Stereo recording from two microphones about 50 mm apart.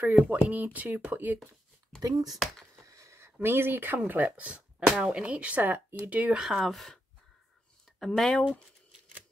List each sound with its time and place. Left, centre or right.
0.0 s speech: right
1.4 s speech: centre
2.7 s a sound: right
3.4 s speech: right
4.5 s a sound: right
5.0 s speech: right
6.4 s speech: centre
8.0 s speech: centre